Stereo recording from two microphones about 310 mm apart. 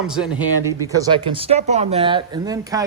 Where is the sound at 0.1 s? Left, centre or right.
Centre.